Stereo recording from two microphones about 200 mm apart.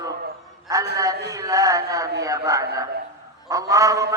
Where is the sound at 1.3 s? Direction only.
15° right (ahead or behind).